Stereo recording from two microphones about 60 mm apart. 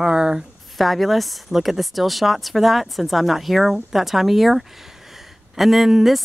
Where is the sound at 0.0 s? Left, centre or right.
Centre.